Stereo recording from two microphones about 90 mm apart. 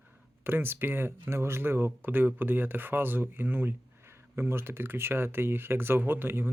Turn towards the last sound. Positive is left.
turn(degrees=-25)  # may be behind; listen again after turning